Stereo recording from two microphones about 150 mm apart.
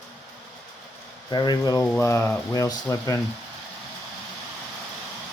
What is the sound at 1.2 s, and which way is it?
Speech, 30° left (ahead or behind).